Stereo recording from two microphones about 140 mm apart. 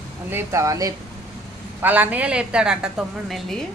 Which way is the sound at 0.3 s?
20° right (ahead or behind).